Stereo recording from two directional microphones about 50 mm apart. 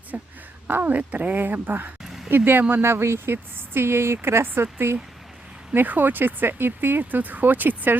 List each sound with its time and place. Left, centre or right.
0.1 s speech: right
2.0 s a sound: centre
2.3 s speech: right
5.7 s speech: right